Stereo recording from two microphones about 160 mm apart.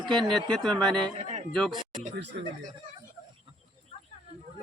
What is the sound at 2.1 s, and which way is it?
Speech, 90° right.